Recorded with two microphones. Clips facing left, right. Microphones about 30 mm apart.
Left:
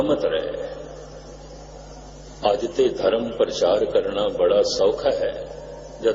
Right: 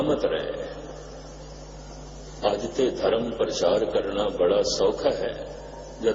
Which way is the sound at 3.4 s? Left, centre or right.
Centre.